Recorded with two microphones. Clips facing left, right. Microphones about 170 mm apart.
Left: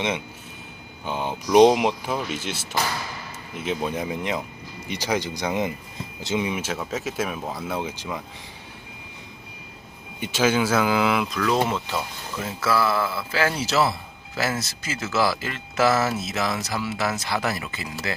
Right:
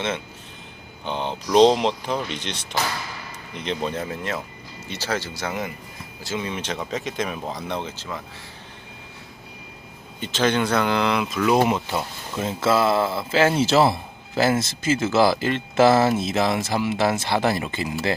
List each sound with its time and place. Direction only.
1.0 s speech: 5° left (ahead or behind)
10.2 s speech: 10° left (ahead or behind)
11.3 s speech: 15° right (ahead or behind)
12.5 s speech: 25° right (ahead or behind)